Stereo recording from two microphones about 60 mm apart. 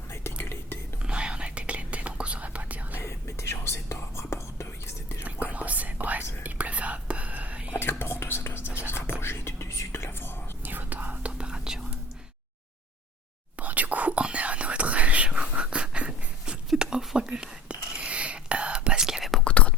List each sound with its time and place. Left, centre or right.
0.1 s whispering: left
1.0 s whispering: centre
2.9 s whispering: left
5.2 s whispering: right
7.7 s whispering: left
10.6 s whispering: right; by 11.8 s centre
13.6 s whispering: right
16.6 s a sound: centre
17.2 s whispering: centre
19.5 s whispering: left